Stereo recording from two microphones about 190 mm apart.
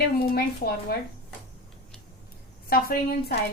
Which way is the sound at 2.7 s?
55° left (ahead or behind).